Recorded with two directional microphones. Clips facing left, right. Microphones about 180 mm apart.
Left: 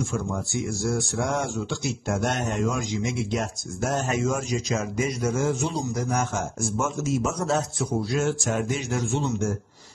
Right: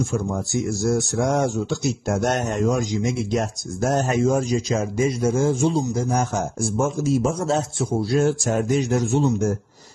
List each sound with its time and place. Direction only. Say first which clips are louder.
0.8 s speech: right 6 dB; 40° right (ahead or behind)